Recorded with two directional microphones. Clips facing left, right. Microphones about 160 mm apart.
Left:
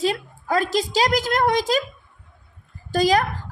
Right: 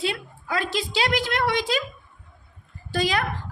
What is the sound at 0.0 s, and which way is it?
A woman's voice, 40° left (ahead or behind).